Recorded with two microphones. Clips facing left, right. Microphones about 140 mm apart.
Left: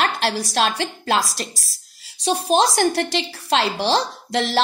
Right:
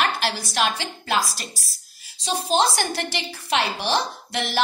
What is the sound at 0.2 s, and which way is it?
A woman's voice, 60° left (ahead or behind).